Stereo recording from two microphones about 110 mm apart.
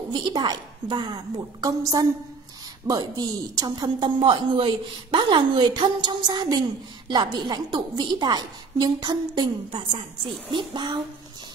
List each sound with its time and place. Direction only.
0.1 s a woman's voice: 45° right (ahead or behind)